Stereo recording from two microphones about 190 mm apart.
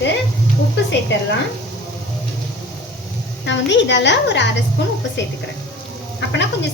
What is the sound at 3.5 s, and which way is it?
A woman's voice, 70° left (ahead or behind).